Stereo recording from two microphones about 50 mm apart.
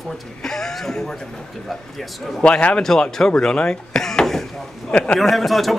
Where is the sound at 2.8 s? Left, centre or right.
Centre.